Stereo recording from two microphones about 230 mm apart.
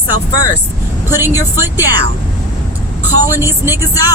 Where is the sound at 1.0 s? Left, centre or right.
Centre.